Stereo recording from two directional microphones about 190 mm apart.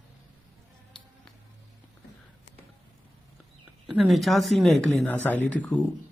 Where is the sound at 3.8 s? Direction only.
Centre (ahead or behind).